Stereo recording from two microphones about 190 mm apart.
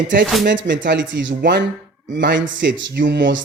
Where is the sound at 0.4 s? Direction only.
75° right (ahead or behind).